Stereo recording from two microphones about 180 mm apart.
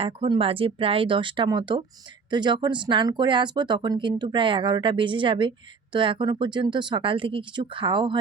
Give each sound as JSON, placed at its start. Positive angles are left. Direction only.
{"t": 0.0, "sound": "speech", "side_deg": -30}